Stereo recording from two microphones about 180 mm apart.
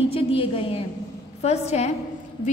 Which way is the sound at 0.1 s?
30° left (ahead or behind).